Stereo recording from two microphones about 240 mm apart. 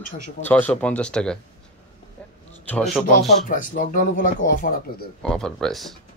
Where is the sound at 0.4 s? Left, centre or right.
Centre.